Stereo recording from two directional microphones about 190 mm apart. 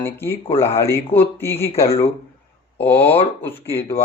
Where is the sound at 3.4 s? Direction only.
10° left (ahead or behind).